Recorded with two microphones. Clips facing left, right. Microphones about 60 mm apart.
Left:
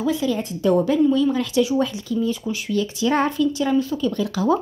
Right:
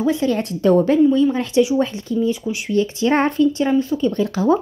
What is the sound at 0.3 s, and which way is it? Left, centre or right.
Speech, right.